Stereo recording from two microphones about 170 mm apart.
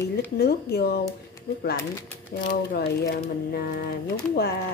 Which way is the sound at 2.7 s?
70° left (ahead or behind).